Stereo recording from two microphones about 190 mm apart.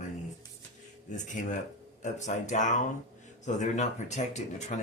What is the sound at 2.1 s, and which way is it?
Speech, 40° left (ahead or behind).